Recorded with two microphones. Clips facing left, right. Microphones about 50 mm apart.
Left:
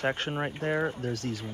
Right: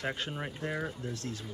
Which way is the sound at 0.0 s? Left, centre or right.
Left.